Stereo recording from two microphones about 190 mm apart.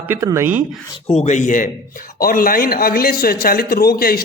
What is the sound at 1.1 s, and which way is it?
A man's voice, 35° left (ahead or behind).